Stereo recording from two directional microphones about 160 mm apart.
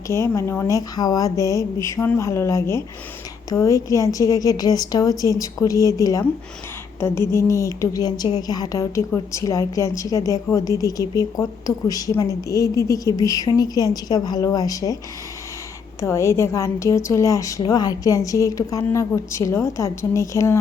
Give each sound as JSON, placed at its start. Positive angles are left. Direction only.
{"t": 0.1, "sound": "a woman's voice", "side_deg": 15}
{"t": 16.0, "sound": "a woman's voice", "side_deg": 20}